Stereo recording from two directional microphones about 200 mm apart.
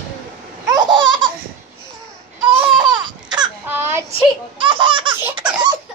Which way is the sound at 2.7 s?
20° right (ahead or behind).